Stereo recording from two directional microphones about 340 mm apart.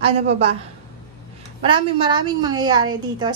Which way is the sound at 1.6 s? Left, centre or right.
Centre.